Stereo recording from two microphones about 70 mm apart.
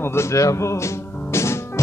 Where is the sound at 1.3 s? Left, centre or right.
Left.